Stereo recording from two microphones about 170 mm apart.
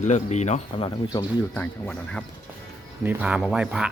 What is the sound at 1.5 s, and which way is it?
Speech, 5° left (ahead or behind).